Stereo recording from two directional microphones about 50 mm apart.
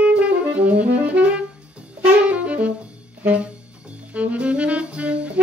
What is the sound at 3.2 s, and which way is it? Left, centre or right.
Music, right.